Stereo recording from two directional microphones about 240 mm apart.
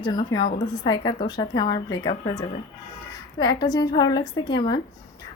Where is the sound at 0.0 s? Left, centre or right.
Centre.